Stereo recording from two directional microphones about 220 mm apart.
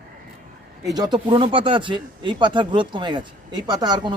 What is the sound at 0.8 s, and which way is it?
Speech, 15° right (ahead or behind).